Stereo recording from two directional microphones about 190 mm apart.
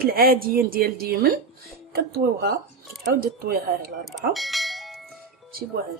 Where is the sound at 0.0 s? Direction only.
50° right (ahead or behind).